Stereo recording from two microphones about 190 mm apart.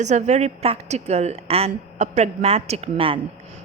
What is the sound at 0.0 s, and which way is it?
A woman's voice, 35° right (ahead or behind).